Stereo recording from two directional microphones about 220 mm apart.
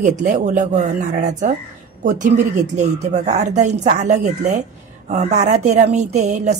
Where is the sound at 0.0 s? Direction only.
30° right (ahead or behind).